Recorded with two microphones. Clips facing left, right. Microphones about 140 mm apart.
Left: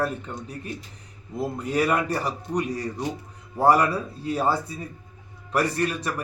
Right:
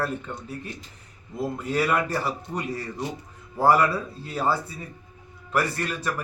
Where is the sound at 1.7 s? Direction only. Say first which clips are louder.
Left 1 dB; 15° left (ahead or behind).